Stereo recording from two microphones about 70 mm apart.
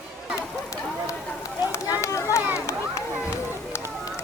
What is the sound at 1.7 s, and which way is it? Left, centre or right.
Speech, left.